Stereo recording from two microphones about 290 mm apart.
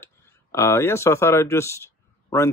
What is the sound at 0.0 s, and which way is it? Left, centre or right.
Speech, centre.